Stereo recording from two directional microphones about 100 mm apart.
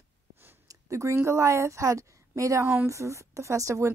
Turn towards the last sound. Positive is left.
turn(degrees=-30)  # may be behind; listen again after turning